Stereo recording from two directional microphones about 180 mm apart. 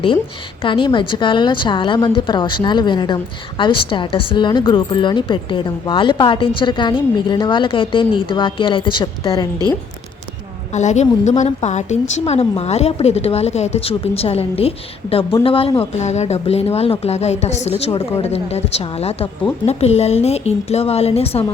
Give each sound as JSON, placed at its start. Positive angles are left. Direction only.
{"t": 0.6, "sound": "a woman's voice", "side_deg": 30}
{"t": 10.7, "sound": "a woman's voice", "side_deg": 40}